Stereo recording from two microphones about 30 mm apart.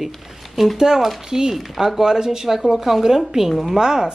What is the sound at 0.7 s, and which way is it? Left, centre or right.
Speech, centre.